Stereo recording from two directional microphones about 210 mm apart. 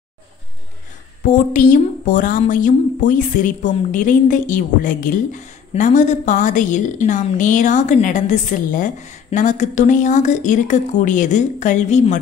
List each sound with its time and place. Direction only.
1.2 s a woman's voice: 40° left (ahead or behind)